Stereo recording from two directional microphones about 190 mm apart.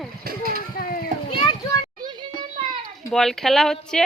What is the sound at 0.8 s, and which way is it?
Children playing, 50° left (ahead or behind).